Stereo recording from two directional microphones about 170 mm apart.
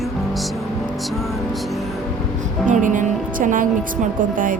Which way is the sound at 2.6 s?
50° right (ahead or behind).